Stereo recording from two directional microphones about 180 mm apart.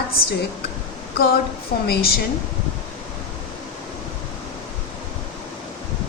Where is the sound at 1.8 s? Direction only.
60° left (ahead or behind).